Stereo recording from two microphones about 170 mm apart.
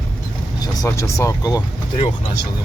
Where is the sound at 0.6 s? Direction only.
20° left (ahead or behind).